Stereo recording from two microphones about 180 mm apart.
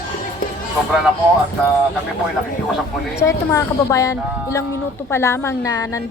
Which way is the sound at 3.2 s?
15° left (ahead or behind).